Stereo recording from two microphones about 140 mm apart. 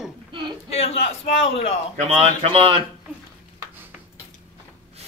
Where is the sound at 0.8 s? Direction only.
45° left (ahead or behind).